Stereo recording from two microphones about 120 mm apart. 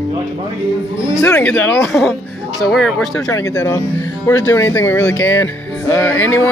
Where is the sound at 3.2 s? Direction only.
25° left (ahead or behind).